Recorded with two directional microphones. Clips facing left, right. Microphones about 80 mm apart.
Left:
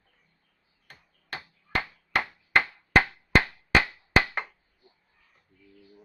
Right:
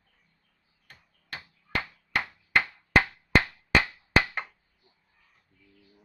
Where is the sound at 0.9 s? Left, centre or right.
Left.